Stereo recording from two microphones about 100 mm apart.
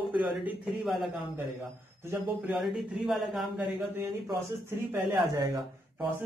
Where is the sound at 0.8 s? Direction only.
Centre (ahead or behind).